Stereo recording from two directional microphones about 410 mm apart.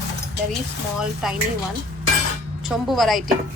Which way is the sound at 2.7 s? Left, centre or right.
Centre.